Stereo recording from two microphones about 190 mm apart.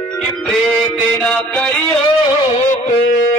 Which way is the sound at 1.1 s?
5° left (ahead or behind).